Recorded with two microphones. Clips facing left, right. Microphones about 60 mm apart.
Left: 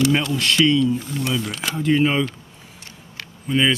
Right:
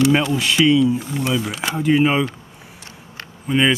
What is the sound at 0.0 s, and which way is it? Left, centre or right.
Speech, centre.